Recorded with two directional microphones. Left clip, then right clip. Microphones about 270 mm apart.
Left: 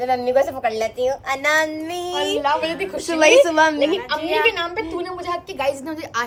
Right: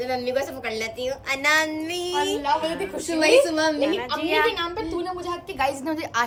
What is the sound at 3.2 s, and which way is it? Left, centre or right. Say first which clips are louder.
Speech: left 5 dB; left.